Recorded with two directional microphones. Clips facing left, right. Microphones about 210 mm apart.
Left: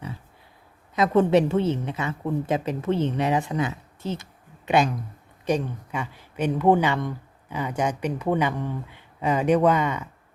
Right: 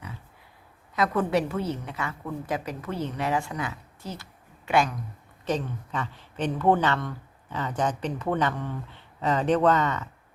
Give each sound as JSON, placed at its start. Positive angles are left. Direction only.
{"t": 0.9, "sound": "a woman's voice", "side_deg": 25}